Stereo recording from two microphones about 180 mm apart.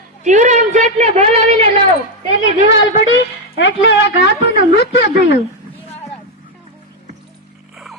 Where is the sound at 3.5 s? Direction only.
90° left; by 4.3 s 70° left (ahead or behind).